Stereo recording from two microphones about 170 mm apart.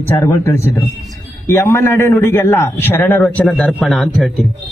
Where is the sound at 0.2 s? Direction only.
15° left (ahead or behind).